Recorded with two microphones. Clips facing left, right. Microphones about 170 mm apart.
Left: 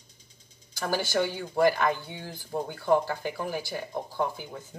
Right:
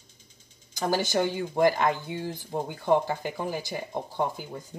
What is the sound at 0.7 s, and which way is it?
Speech, 15° right (ahead or behind).